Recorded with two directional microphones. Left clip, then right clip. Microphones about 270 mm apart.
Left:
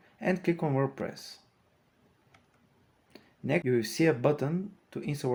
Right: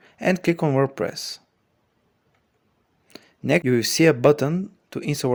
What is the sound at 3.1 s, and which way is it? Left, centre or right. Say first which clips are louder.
Speech: right 10 dB; right.